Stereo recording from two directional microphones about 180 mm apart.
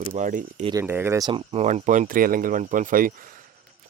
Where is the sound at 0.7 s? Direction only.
15° right (ahead or behind).